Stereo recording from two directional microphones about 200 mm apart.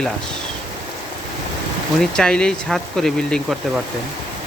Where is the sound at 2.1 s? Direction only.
5° left (ahead or behind).